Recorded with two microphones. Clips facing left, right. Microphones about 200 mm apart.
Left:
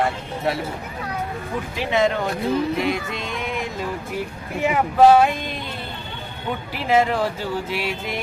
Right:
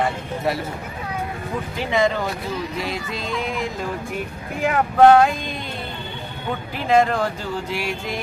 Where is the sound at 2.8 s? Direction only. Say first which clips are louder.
Left 4 dB; 55° left (ahead or behind).